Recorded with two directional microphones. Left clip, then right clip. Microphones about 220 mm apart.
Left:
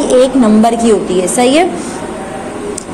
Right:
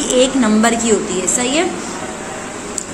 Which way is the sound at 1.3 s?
20° left (ahead or behind).